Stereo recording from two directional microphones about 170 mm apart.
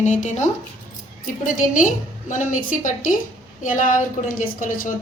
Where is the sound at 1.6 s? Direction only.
50° left (ahead or behind).